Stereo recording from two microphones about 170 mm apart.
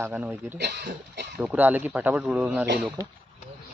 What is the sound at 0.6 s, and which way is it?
Speech, 90° right.